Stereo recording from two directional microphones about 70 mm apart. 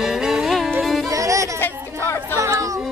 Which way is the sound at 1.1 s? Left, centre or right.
Right.